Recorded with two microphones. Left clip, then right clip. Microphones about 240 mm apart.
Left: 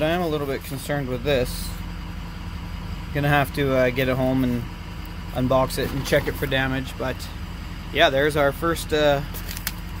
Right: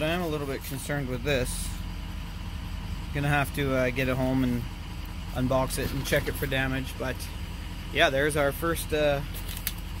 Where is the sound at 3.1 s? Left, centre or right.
Centre.